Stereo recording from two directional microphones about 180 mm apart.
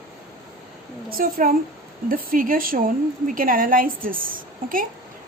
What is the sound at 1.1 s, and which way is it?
A woman's voice, 50° right (ahead or behind).